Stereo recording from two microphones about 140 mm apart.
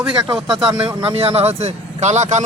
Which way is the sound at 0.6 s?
35° right (ahead or behind).